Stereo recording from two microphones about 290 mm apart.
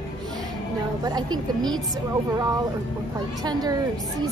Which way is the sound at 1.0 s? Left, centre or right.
Centre.